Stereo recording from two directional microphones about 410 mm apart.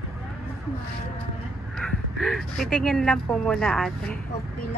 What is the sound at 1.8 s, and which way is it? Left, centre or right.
Speech, centre.